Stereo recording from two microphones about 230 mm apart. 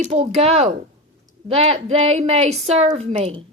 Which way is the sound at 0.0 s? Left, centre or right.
Right.